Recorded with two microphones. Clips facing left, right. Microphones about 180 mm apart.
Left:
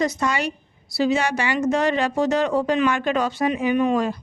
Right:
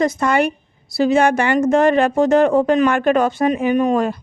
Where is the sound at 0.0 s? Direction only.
55° right (ahead or behind).